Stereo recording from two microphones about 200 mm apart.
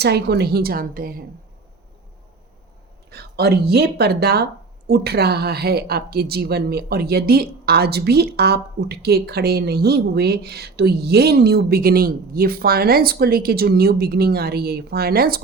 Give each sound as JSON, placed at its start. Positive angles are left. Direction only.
{"t": 0.0, "sound": "a woman's voice", "side_deg": -55}
{"t": 3.1, "sound": "a woman's voice", "side_deg": -55}